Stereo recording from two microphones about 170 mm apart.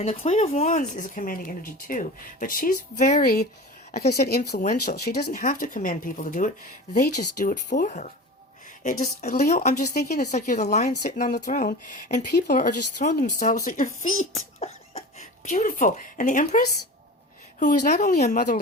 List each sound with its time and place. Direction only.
0.0 s speech: 40° left (ahead or behind)
6.9 s speech: 70° left (ahead or behind)
7.9 s speech: 45° left (ahead or behind)
9.3 s speech: 60° left (ahead or behind)
9.6 s speech: 45° left (ahead or behind)
14.6 s beatboxing: 35° left (ahead or behind)
15.4 s speech: 50° left (ahead or behind)
17.9 s speech: 60° left (ahead or behind)